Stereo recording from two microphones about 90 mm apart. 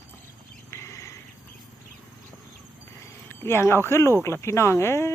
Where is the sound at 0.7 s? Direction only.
35° left (ahead or behind).